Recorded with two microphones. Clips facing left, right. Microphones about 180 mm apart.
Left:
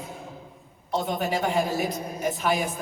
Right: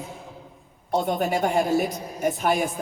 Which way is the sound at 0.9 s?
50° right (ahead or behind).